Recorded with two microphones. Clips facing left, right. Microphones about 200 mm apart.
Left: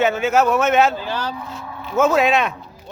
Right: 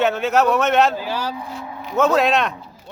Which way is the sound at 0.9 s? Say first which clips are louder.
Right 1 dB; 10° right (ahead or behind).